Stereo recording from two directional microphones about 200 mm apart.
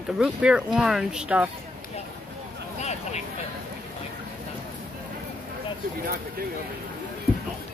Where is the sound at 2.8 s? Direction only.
35° left (ahead or behind).